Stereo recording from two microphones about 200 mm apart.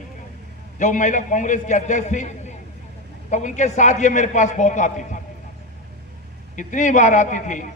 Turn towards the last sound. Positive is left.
turn(degrees=40)  # may be behind; listen again after turning